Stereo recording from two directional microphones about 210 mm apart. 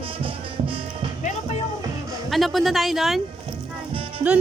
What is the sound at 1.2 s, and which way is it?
Music, 35° left (ahead or behind).